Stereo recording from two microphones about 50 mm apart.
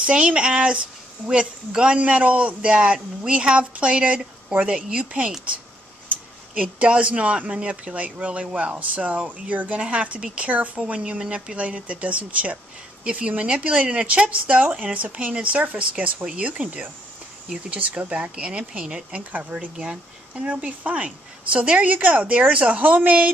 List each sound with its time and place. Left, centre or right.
0.0 s speech: right
6.5 s speech: right